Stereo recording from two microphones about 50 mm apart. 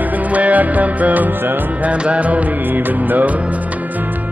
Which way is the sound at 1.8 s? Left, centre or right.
Right.